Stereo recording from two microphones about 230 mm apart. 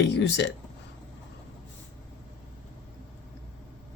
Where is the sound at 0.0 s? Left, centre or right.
Left.